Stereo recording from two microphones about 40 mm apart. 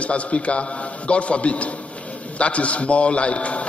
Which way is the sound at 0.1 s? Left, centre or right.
Left.